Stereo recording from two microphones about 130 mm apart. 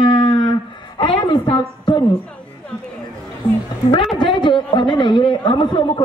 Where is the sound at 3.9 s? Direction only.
40° left (ahead or behind).